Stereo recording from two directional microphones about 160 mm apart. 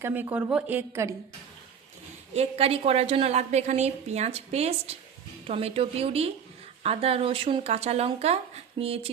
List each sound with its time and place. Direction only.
0.0 s a woman's voice: 10° right (ahead or behind)
2.3 s a woman's voice: 40° right (ahead or behind)